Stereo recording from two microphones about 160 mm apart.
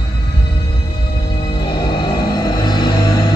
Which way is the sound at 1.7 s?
25° left (ahead or behind).